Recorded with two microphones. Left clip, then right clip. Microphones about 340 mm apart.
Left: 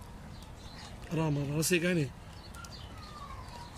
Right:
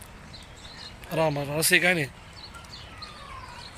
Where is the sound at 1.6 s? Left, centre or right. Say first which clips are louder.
Right 9 dB; centre.